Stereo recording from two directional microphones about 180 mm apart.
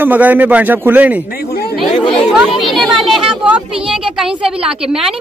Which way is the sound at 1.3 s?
60° left (ahead or behind).